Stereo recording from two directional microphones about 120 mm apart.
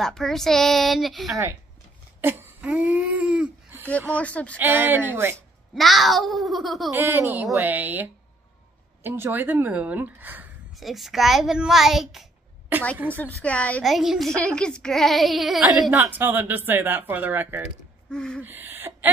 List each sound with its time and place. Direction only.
0.0 s speech: 5° left (ahead or behind)
2.2 s speech: 15° right (ahead or behind)
4.2 s speech: 10° left (ahead or behind)
4.6 s speech: 15° right (ahead or behind)
5.8 s speech: centre (ahead or behind)
6.9 s speech: 20° right (ahead or behind)
10.8 s speech: centre (ahead or behind)
12.7 s a woman's voice: 15° right (ahead or behind)
13.1 s speech: 10° left (ahead or behind)
13.8 s speech: centre (ahead or behind)
15.9 s speech: 20° right (ahead or behind)
18.1 s speech: 5° left (ahead or behind)
18.4 s a sound: 15° right (ahead or behind)